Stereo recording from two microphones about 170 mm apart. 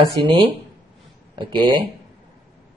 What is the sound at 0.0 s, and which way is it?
Speech, 30° right (ahead or behind).